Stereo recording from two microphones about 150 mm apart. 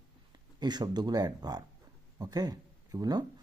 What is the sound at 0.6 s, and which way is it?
Speech, 30° right (ahead or behind).